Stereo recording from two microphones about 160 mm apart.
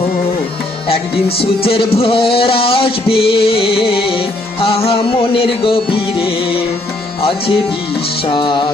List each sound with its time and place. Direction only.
1.4 s music: 35° left (ahead or behind)